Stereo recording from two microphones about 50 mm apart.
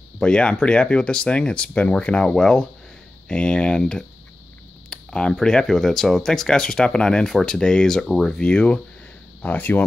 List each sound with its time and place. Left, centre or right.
0.2 s speech: centre
4.8 s a sound: centre
5.3 s speech: centre
9.4 s speech: left